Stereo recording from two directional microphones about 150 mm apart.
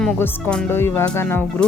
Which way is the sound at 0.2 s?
15° left (ahead or behind).